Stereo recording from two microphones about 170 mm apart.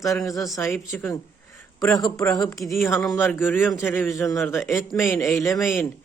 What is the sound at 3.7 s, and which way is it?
Speech, centre (ahead or behind).